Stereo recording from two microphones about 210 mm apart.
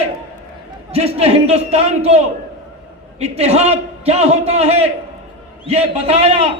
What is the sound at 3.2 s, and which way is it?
A man's voice, 30° right (ahead or behind).